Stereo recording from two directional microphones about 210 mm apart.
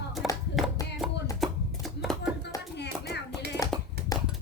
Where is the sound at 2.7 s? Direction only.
55° left (ahead or behind).